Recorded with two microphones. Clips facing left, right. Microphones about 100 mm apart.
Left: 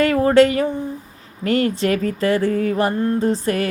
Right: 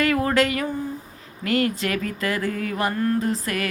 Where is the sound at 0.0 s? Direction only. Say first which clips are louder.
Left 7 dB; 30° left (ahead or behind).